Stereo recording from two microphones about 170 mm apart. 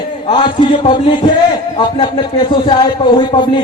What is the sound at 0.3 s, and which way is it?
Speech, 30° left (ahead or behind).